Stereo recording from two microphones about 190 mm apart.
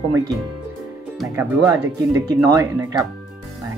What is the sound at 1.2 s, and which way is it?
Speech, 15° right (ahead or behind).